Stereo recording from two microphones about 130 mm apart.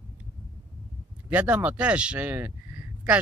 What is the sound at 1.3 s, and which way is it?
Speech, 10° right (ahead or behind).